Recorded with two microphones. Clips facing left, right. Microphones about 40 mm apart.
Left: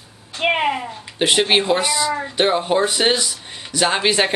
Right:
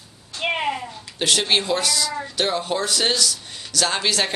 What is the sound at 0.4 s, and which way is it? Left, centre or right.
Speech, left.